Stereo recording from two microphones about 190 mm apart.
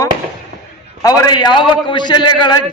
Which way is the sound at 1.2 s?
25° left (ahead or behind).